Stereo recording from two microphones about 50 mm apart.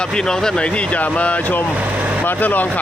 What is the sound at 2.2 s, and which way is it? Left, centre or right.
Speech, left.